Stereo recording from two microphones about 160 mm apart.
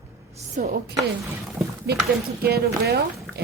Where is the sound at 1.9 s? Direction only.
90° right.